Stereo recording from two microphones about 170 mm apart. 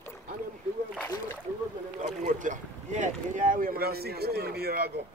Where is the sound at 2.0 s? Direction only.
45° right (ahead or behind); by 4.8 s 70° right (ahead or behind).